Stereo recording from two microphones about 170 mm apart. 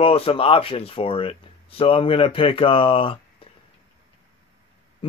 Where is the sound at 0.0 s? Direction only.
35° left (ahead or behind).